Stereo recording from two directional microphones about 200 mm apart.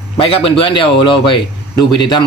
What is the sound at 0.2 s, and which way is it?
Speech, 30° left (ahead or behind).